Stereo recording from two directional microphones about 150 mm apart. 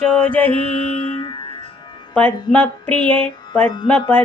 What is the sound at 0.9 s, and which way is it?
Music, 45° left (ahead or behind).